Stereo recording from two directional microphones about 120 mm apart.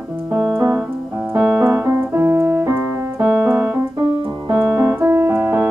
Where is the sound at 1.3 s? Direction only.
15° right (ahead or behind).